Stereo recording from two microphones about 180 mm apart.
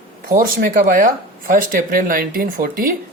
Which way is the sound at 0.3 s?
55° right (ahead or behind).